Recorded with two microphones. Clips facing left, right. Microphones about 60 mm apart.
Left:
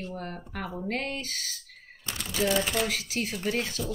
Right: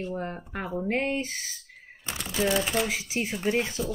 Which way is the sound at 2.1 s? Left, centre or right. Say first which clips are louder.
Right 1 dB; centre.